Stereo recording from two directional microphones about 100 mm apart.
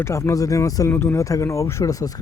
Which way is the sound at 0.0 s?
30° left (ahead or behind).